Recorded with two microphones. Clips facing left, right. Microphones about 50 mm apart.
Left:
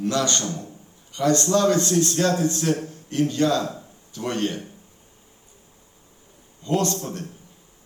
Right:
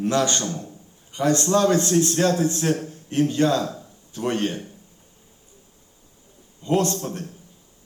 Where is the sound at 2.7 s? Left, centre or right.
Left.